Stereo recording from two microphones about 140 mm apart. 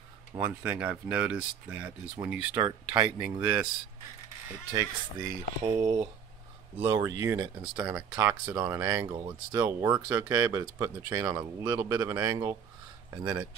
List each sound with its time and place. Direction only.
0.4 s speech: 10° right (ahead or behind)
2.5 s speech: 30° right (ahead or behind)
3.2 s speech: 10° right (ahead or behind)
8.2 s speech: 20° right (ahead or behind)